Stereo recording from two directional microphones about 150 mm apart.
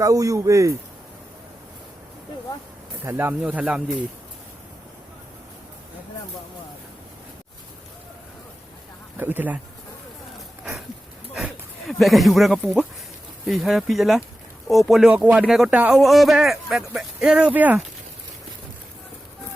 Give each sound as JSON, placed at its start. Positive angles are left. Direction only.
{"t": 0.0, "sound": "speech", "side_deg": -20}
{"t": 3.0, "sound": "speech", "side_deg": -15}
{"t": 9.1, "sound": "speech", "side_deg": -15}
{"t": 11.3, "sound": "speech", "side_deg": 0}